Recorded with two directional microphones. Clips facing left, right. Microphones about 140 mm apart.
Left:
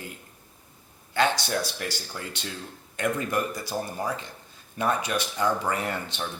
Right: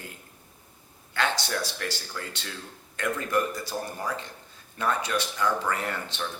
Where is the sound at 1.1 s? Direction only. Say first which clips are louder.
Left 4 dB; 20° left (ahead or behind).